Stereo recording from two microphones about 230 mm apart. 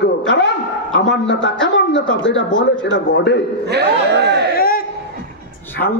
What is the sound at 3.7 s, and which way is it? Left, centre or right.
Speech, right.